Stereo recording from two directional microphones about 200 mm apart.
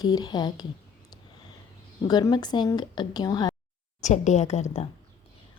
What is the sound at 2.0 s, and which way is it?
A woman's voice, 20° left (ahead or behind).